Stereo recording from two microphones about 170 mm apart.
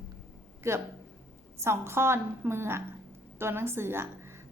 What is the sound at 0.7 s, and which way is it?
A woman's voice, 15° right (ahead or behind).